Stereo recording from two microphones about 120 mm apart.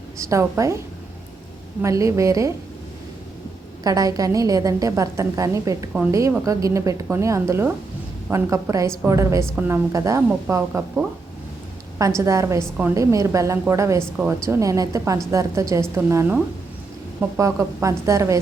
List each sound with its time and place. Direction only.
0.2 s a woman's voice: 25° right (ahead or behind)
1.8 s a woman's voice: 25° right (ahead or behind)
3.8 s a woman's voice: 30° right (ahead or behind)
11.9 s a woman's voice: 25° right (ahead or behind)